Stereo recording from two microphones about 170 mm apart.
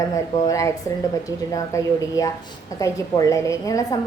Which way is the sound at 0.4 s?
20° left (ahead or behind).